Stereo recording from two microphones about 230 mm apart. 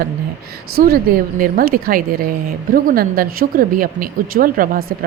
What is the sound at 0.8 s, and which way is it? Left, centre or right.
A woman's voice, right.